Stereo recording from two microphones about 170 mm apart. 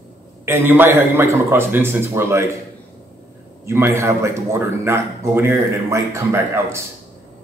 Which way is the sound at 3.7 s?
15° right (ahead or behind).